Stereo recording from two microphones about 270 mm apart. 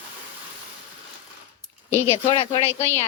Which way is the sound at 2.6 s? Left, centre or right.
Centre.